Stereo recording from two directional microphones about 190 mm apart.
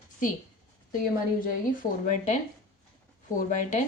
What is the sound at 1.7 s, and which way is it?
Speech, 45° left (ahead or behind).